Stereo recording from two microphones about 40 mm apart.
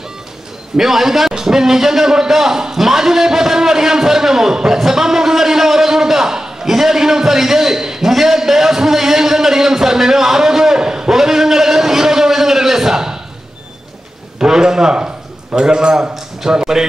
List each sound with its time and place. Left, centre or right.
0.7 s a man's voice: centre
14.4 s a man's voice: centre